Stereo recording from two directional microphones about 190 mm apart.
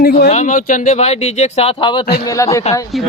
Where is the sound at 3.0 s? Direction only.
Centre (ahead or behind).